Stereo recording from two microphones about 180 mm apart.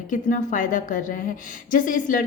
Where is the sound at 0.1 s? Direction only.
45° left (ahead or behind).